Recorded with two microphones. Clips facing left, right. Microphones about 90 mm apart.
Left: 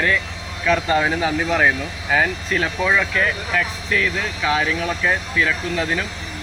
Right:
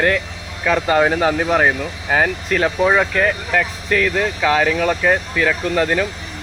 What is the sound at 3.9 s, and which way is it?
Speech, 70° right (ahead or behind).